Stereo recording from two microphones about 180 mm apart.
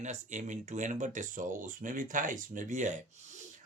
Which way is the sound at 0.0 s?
40° right (ahead or behind).